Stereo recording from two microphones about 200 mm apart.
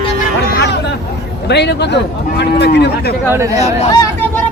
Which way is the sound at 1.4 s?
55° left (ahead or behind).